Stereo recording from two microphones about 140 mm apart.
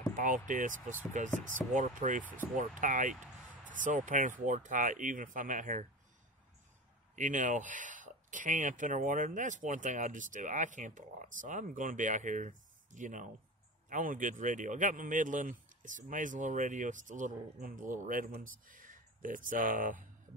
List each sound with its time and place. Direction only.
0.1 s speech: 70° right (ahead or behind)
7.2 s speech: 65° right (ahead or behind)